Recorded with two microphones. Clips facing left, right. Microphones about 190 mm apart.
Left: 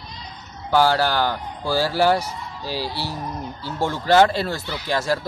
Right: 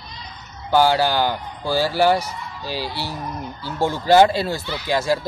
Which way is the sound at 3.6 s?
5° right (ahead or behind).